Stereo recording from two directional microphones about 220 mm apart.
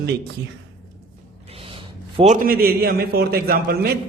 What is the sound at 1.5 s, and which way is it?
A man's voice, 25° right (ahead or behind).